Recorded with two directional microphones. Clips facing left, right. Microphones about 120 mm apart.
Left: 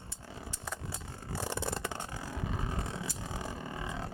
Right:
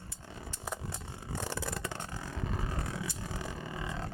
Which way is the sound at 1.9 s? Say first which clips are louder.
Left 1 dB; 10° left (ahead or behind).